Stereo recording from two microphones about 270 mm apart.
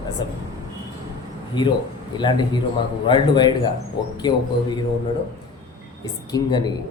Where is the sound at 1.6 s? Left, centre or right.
Centre.